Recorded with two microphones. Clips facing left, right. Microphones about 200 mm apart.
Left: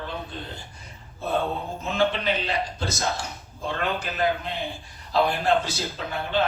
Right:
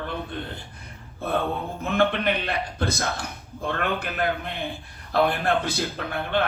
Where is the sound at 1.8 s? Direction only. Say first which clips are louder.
Right 2 dB; 60° right (ahead or behind).